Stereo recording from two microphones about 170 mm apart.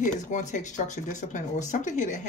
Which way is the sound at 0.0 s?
45° left (ahead or behind).